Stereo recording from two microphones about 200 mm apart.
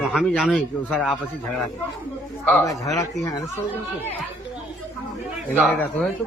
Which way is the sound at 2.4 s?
10° left (ahead or behind).